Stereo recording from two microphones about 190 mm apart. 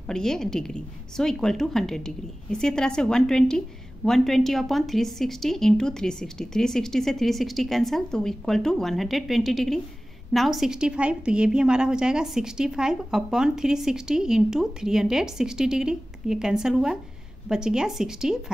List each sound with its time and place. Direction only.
0.0 s a woman's voice: 5° left (ahead or behind)